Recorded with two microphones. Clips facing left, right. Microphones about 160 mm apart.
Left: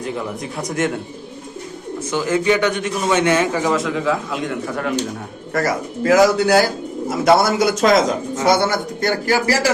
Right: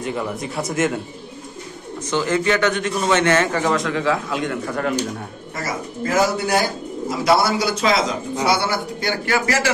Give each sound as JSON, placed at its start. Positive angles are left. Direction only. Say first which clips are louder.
{"t": 0.0, "sound": "speech", "louder": "even", "side_deg": 0}
{"t": 2.0, "sound": "a man's voice", "louder": "left 2 dB", "side_deg": 10}
{"t": 5.5, "sound": "speech", "louder": "left 7 dB", "side_deg": 80}
{"t": 7.1, "sound": "a man's voice", "louder": "left 3 dB", "side_deg": 50}